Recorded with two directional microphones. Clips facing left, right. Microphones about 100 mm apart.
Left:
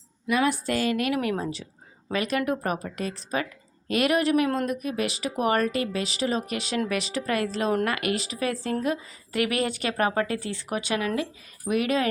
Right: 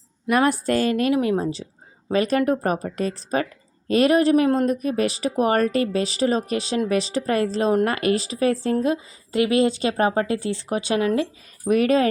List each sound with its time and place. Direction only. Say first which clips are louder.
0.3 s speech: right 5 dB; 45° right (ahead or behind)